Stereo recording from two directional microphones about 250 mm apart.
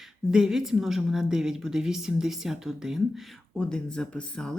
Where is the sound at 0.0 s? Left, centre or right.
Centre.